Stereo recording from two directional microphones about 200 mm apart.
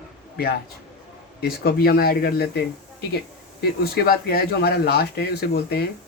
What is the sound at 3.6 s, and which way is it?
Speech, 50° left (ahead or behind).